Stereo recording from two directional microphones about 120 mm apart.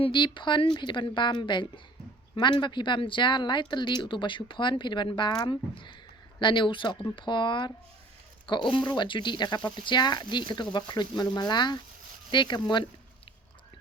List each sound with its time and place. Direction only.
0.0 s speech: 40° left (ahead or behind)